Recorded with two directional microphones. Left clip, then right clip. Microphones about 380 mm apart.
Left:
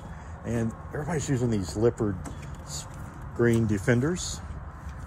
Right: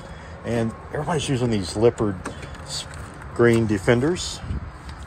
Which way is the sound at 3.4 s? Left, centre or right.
Right.